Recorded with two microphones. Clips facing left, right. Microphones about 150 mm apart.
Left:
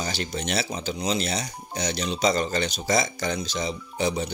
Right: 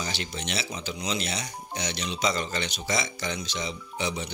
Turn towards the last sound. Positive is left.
turn(degrees=40)  # may be behind; listen again after turning